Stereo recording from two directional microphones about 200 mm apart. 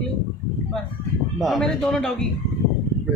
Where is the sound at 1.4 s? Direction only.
Centre (ahead or behind).